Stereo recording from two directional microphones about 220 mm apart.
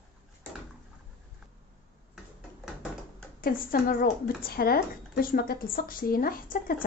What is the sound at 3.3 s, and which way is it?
Speech, 40° left (ahead or behind).